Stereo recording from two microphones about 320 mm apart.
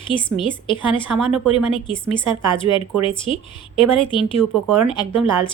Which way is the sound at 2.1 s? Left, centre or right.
Centre.